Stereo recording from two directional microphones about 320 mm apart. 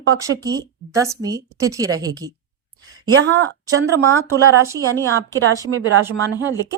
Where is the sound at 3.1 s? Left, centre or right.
Right.